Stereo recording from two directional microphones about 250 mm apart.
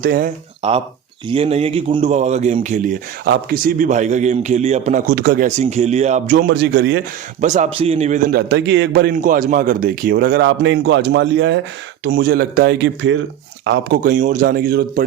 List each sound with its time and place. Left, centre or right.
0.0 s a man's voice: right
0.6 s speech: right
6.3 s a man's voice: right
7.4 s a man's voice: right